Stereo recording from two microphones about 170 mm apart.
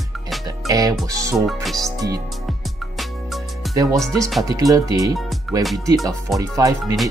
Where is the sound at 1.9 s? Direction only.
20° right (ahead or behind).